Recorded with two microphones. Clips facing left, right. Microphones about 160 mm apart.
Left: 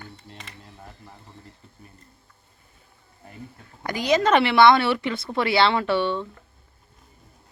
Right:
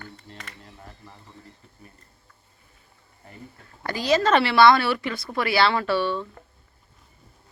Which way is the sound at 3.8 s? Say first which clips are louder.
Left 1 dB; 20° left (ahead or behind).